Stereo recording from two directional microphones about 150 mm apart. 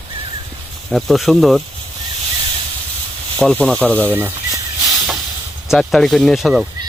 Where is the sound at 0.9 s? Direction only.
Centre (ahead or behind).